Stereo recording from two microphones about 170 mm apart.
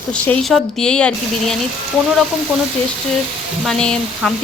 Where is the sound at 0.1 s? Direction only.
5° left (ahead or behind).